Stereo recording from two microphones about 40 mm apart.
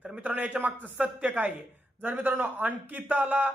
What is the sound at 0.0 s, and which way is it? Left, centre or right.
A man's voice, right.